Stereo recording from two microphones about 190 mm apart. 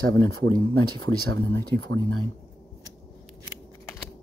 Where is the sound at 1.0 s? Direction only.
80° right.